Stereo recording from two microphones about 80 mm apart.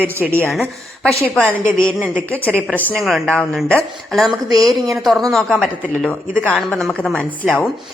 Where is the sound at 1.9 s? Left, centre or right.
Centre.